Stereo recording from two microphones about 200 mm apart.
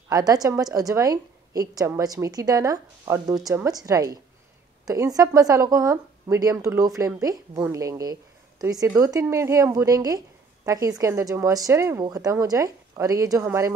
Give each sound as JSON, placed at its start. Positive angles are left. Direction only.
{"t": 0.1, "sound": "speech", "side_deg": -20}